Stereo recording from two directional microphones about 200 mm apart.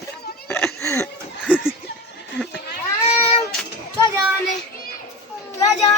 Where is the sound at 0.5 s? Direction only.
10° left (ahead or behind).